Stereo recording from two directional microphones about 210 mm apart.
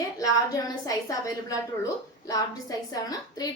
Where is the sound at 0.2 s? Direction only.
15° left (ahead or behind).